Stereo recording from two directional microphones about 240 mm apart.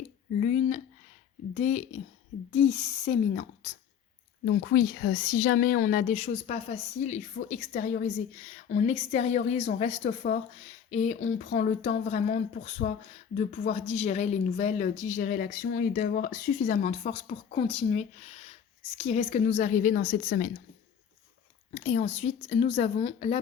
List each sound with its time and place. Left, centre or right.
0.3 s a sound: left
1.5 s a woman's voice: left
21.8 s speech: left